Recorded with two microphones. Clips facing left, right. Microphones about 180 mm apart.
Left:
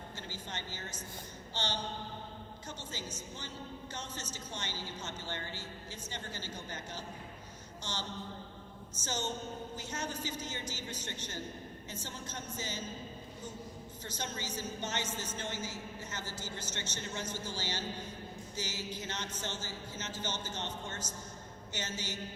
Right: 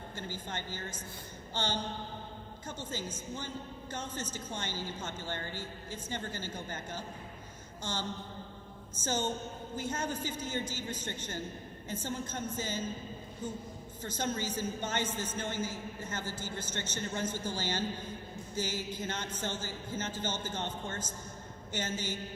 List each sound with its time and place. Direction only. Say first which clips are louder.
0.2 s a woman's voice: right 5 dB; 50° right (ahead or behind)
9.0 s a woman's voice: right 4 dB; 50° right (ahead or behind)
14.0 s a woman's voice: right 7 dB; 50° right (ahead or behind)